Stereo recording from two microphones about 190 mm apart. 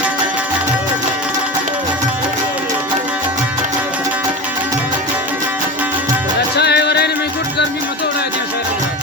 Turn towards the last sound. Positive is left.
turn(degrees=60)  # may be behind; listen again after turning